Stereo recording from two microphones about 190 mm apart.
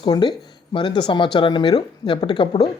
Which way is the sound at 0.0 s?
25° left (ahead or behind).